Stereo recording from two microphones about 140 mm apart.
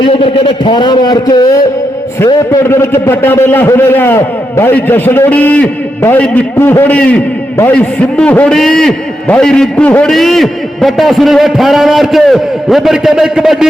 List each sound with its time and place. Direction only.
0.0 s a man's voice: 45° left (ahead or behind); by 13.7 s 5° right (ahead or behind)